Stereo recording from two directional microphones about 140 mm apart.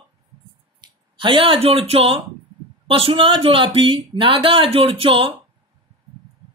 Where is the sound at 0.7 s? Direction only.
35° right (ahead or behind).